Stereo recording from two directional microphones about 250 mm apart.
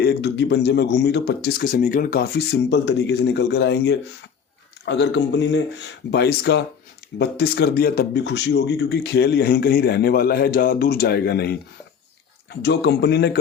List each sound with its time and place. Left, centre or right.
0.0 s speech: left